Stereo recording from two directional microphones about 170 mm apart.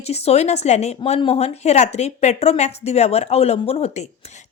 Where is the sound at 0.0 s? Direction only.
40° left (ahead or behind).